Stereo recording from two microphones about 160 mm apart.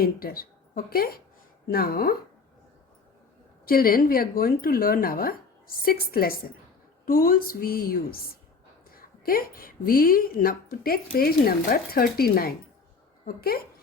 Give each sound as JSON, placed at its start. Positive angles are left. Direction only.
{"t": 0.0, "sound": "speech", "side_deg": 70}
{"t": 3.7, "sound": "a woman's voice", "side_deg": 65}